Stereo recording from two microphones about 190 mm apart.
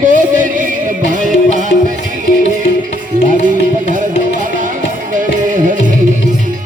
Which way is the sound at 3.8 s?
45° right (ahead or behind).